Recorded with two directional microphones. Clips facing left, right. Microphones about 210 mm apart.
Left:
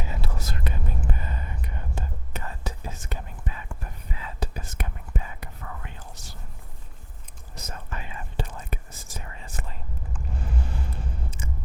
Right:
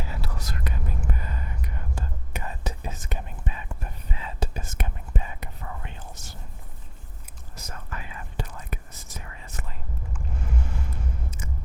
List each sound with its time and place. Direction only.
0.0 s whispering: 25° left (ahead or behind)
2.3 s whispering: 15° right (ahead or behind)
7.7 s whispering: 25° left (ahead or behind)